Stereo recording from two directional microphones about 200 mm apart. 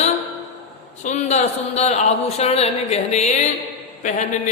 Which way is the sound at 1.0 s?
35° left (ahead or behind).